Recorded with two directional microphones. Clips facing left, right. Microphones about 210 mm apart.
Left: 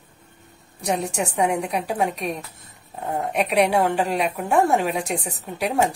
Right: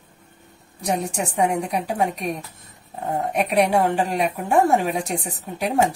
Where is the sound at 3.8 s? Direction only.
45° right (ahead or behind).